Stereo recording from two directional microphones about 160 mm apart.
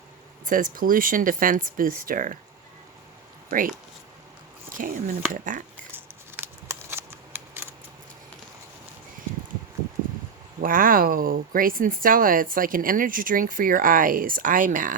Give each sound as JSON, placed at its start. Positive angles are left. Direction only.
{"t": 0.4, "sound": "speech", "side_deg": -55}
{"t": 4.7, "sound": "speech", "side_deg": -60}
{"t": 5.9, "sound": "scissors", "side_deg": -15}
{"t": 10.6, "sound": "speech", "side_deg": -60}